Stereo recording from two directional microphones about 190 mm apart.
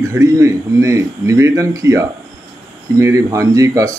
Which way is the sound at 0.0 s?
15° right (ahead or behind).